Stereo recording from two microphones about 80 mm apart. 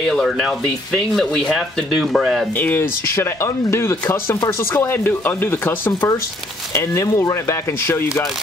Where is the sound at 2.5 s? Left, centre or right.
Left.